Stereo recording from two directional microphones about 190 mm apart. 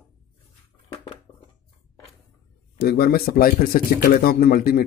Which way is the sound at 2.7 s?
55° left (ahead or behind).